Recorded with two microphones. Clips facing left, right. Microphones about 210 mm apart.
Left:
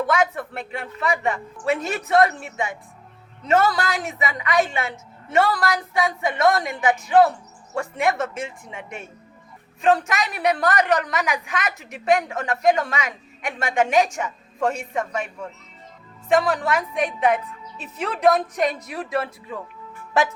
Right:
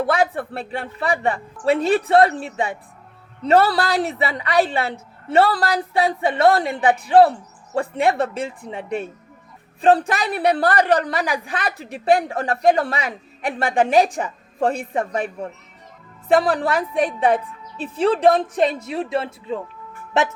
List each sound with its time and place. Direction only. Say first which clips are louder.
0.0 s a woman's voice: right 2 dB; 35° right (ahead or behind)